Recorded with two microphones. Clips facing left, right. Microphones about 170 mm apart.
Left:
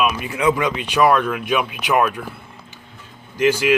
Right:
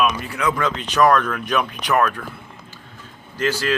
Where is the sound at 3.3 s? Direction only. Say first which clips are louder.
Left 5 dB; 15° left (ahead or behind).